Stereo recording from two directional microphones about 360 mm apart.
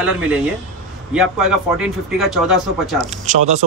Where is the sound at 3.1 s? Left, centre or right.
Centre.